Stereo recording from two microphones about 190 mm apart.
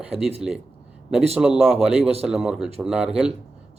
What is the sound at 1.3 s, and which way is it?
A man's voice, 5° right (ahead or behind).